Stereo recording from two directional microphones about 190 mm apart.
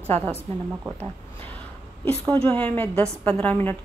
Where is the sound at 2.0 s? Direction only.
10° left (ahead or behind).